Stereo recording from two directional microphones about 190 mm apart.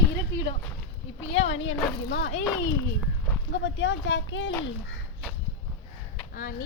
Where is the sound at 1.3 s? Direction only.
75° left (ahead or behind).